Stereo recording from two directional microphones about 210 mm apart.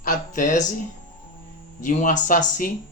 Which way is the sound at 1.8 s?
35° left (ahead or behind).